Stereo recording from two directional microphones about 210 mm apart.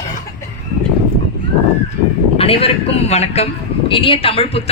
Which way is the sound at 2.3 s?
25° left (ahead or behind).